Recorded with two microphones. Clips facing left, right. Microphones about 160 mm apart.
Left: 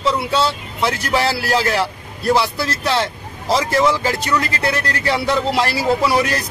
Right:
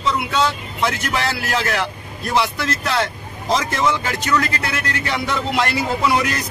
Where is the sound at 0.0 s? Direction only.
30° left (ahead or behind).